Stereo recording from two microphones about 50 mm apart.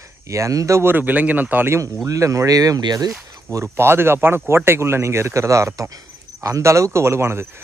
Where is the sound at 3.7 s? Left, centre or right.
Right.